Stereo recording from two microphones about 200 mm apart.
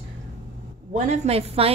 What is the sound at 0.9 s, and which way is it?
Speech, 35° right (ahead or behind).